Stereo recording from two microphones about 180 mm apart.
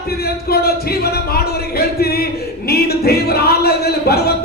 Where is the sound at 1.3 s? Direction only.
60° left (ahead or behind).